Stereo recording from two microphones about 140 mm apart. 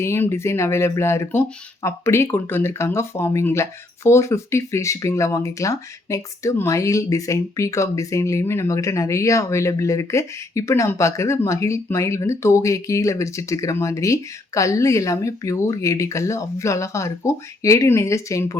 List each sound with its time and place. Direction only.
0.0 s speech: 20° left (ahead or behind)